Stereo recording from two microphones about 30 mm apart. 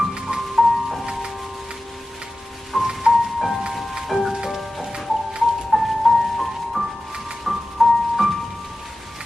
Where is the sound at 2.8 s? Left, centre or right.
Centre.